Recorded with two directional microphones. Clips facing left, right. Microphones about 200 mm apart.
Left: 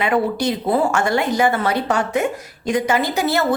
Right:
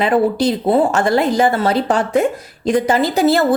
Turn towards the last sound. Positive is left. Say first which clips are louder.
# right 5 dB
turn(degrees=-30)  # may be behind; listen again after turning